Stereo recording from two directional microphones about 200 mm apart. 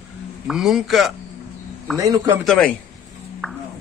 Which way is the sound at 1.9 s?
15° right (ahead or behind).